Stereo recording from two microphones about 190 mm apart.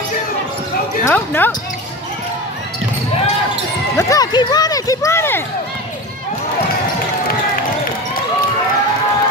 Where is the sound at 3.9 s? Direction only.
15° left (ahead or behind).